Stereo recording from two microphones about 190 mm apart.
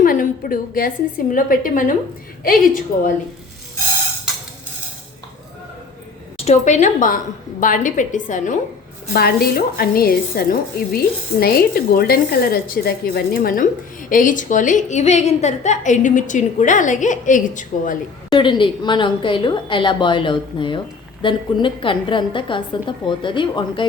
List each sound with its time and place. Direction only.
0.0 s a woman's voice: 45° left (ahead or behind)
6.3 s a woman's voice: 35° left (ahead or behind)
9.1 s a woman's voice: 55° left (ahead or behind)
18.3 s a woman's voice: 25° left (ahead or behind)